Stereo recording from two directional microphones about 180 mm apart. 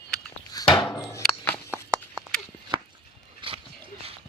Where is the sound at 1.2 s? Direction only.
10° left (ahead or behind).